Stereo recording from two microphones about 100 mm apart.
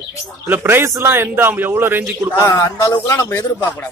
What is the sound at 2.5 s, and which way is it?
Speech, 35° left (ahead or behind).